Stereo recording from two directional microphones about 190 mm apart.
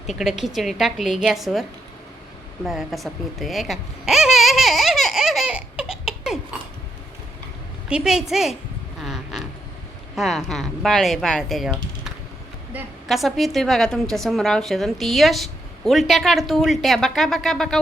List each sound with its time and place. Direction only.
0.1 s a woman's voice: centre (ahead or behind)
2.6 s babbling: centre (ahead or behind)
7.9 s a woman's voice: 5° right (ahead or behind)
9.0 s a sound: centre (ahead or behind)
10.2 s a woman's voice: centre (ahead or behind)